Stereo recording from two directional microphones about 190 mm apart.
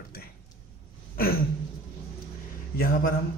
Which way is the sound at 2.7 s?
50° left (ahead or behind).